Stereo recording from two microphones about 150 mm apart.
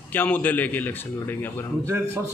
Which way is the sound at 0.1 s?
10° left (ahead or behind).